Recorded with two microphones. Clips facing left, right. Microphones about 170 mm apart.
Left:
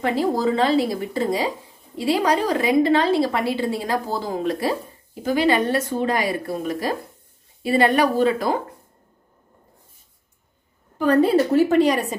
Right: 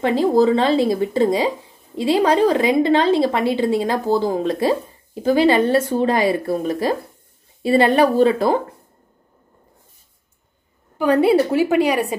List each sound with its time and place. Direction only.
0.4 s a woman's voice: 25° right (ahead or behind)
11.3 s a woman's voice: 10° right (ahead or behind)